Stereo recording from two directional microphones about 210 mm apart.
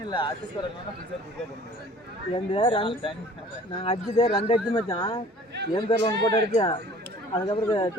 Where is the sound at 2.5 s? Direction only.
25° left (ahead or behind).